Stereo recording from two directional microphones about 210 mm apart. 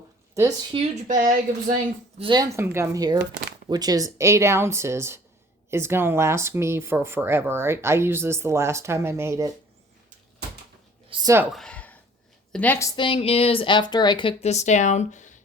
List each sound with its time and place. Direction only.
0.3 s speech: 20° right (ahead or behind)
1.0 s speech: 40° right (ahead or behind)
2.1 s speech: 20° right (ahead or behind)
3.2 s speech: 55° right (ahead or behind)
3.7 s speech: 20° right (ahead or behind)
11.1 s speech: 15° right (ahead or behind)
11.5 s a sound: 5° left (ahead or behind)
12.5 s a woman's voice: 5° left (ahead or behind)
13.0 s speech: 25° left (ahead or behind)